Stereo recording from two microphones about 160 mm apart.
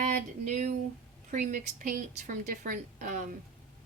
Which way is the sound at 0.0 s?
50° right (ahead or behind).